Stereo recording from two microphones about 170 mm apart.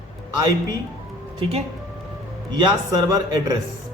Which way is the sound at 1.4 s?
35° right (ahead or behind).